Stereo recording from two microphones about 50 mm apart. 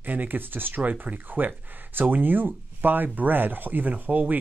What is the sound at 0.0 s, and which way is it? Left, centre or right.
Speech, right.